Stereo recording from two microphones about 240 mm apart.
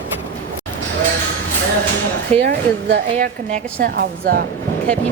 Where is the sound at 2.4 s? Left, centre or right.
Right.